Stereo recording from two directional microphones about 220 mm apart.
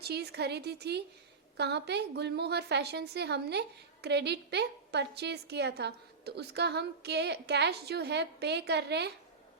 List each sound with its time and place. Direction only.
0.0 s a woman's voice: 45° right (ahead or behind)